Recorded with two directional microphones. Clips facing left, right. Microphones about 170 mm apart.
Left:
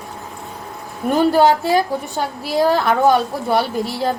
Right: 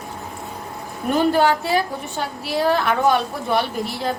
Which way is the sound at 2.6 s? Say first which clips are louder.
Left 4 dB; 40° left (ahead or behind).